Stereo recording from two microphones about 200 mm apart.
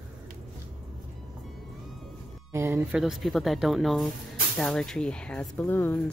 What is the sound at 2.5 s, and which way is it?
Speech, 15° right (ahead or behind).